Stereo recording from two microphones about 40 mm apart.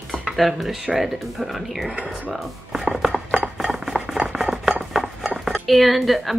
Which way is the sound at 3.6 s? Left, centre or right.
Centre.